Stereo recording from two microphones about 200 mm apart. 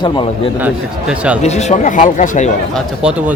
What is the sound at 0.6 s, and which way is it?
Speech, 5° right (ahead or behind).